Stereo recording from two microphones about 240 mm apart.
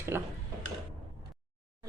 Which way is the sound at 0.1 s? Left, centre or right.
Centre.